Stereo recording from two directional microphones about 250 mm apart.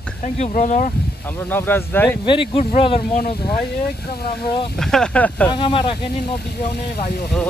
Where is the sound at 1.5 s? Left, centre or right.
Centre.